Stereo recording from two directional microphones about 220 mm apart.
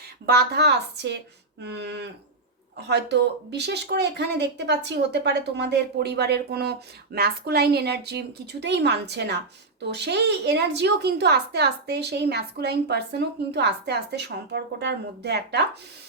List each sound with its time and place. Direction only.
0.3 s a woman's voice: 45° right (ahead or behind)